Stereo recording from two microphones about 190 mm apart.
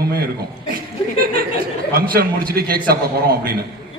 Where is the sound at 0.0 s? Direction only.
55° right (ahead or behind).